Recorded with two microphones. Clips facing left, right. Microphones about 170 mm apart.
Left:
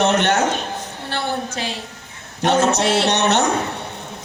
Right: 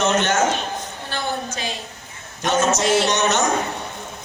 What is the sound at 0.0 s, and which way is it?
A man's voice, 65° left (ahead or behind).